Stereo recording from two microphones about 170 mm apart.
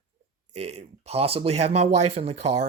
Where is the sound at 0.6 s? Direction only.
40° right (ahead or behind).